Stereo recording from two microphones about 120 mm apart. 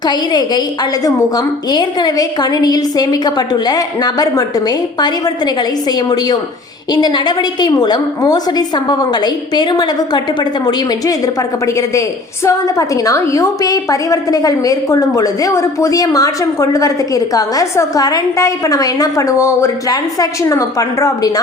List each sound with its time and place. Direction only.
0.0 s a woman's voice: 35° left (ahead or behind)
6.9 s a woman's voice: 35° left (ahead or behind)
11.6 s a woman's voice: 30° left (ahead or behind)